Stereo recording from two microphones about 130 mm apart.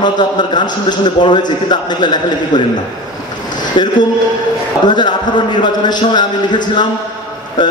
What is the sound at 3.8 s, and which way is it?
A man's voice, 35° left (ahead or behind).